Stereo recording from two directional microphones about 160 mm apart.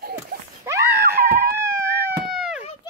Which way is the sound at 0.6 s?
20° right (ahead or behind).